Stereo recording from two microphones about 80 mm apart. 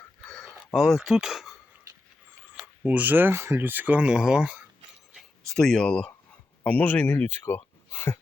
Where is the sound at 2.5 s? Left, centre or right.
Centre.